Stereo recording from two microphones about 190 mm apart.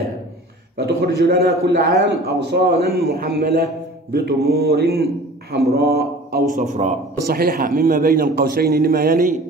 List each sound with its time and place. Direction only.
0.7 s a man's voice: 60° right (ahead or behind)
5.5 s a sound: 55° right (ahead or behind)
6.6 s a man's voice: 40° right (ahead or behind)
7.2 s a man's voice: 50° right (ahead or behind)